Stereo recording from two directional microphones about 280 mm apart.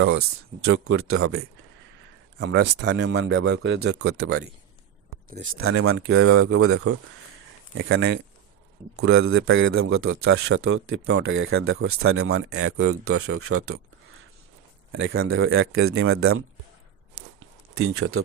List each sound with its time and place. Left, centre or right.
0.0 s speech: right
5.4 s speech: right
17.4 s a sound: right